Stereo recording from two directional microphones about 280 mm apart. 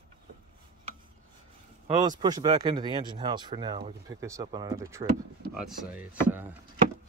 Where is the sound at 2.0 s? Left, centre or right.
Centre.